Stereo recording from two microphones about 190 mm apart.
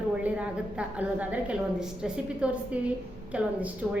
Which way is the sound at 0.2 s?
5° right (ahead or behind).